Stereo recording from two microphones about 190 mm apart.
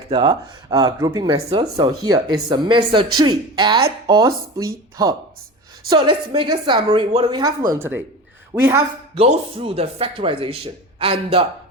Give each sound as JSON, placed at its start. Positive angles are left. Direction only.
{"t": 0.1, "sound": "speech", "side_deg": -25}
{"t": 9.1, "sound": "speech", "side_deg": -30}